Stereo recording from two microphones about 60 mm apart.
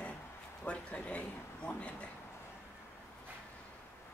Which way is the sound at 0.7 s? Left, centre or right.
Centre.